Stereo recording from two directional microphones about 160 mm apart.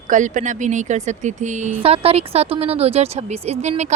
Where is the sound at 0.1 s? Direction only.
50° right (ahead or behind).